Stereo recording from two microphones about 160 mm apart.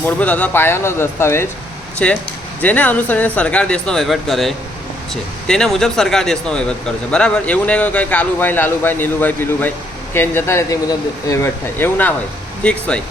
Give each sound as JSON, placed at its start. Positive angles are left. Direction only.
{"t": 0.0, "sound": "speech", "side_deg": 10}